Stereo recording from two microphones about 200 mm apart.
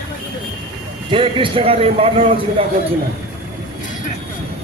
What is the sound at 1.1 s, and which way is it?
A man's voice, 25° right (ahead or behind).